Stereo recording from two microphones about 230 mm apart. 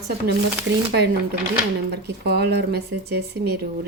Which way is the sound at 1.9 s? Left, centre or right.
Right.